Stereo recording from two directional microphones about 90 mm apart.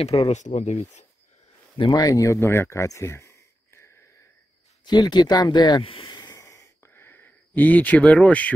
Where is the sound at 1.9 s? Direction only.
40° left (ahead or behind).